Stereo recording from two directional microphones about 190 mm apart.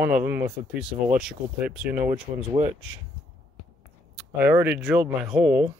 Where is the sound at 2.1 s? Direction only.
25° right (ahead or behind).